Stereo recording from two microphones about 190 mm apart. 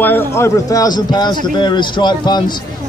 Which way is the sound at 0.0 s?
10° left (ahead or behind).